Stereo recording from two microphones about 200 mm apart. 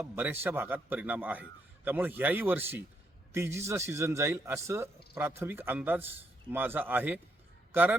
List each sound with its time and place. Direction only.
0.0 s a man's voice: 10° right (ahead or behind)